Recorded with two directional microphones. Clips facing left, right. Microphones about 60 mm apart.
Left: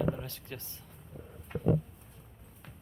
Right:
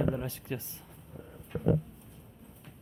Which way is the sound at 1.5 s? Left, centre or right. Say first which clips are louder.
Right 1 dB; left.